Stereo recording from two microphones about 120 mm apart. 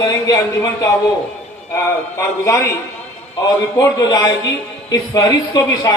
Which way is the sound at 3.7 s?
30° left (ahead or behind).